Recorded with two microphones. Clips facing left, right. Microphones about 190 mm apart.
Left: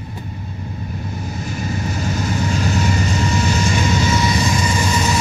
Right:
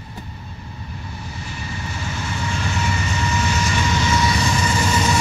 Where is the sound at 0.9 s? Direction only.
45° left (ahead or behind).